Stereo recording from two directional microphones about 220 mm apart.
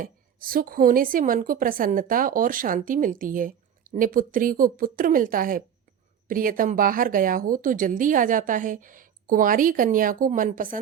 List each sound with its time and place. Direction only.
0.0 s a woman's voice: 40° right (ahead or behind)